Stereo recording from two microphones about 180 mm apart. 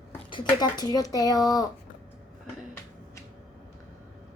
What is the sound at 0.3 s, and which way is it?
Speech, 25° left (ahead or behind).